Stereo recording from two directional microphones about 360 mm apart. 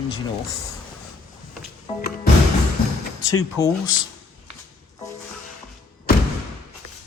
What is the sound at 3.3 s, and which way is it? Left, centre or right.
Speech, centre.